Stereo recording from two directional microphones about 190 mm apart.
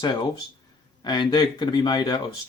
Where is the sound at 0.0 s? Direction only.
20° left (ahead or behind).